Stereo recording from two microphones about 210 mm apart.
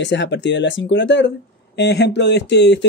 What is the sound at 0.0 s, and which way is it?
Speech, 60° left (ahead or behind).